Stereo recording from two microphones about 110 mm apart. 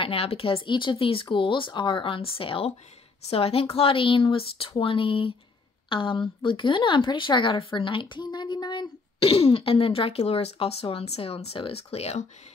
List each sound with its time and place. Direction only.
0.0 s speech: 60° left (ahead or behind); by 12.3 s 75° left (ahead or behind)